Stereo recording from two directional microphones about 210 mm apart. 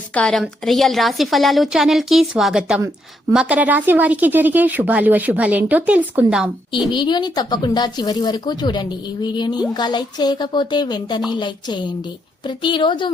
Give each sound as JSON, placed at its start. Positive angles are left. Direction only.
{"t": 0.1, "sound": "a woman's voice", "side_deg": 5}
{"t": 6.9, "sound": "speech", "side_deg": 20}